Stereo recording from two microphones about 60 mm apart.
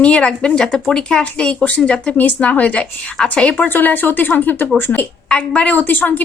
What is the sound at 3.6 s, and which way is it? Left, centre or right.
A woman's voice, left.